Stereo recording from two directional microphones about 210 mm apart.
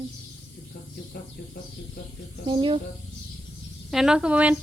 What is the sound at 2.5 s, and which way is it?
Speech, 25° right (ahead or behind).